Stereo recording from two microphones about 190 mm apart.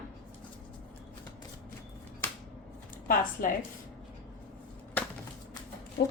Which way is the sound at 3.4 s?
45° left (ahead or behind).